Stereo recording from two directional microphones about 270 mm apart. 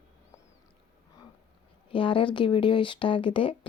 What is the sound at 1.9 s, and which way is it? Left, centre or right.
Speech, centre.